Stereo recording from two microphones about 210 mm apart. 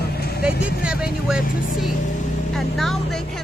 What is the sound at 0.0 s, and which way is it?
Vehicle, 50° left (ahead or behind).